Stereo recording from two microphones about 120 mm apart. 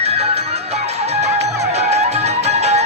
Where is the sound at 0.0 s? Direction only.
60° right (ahead or behind).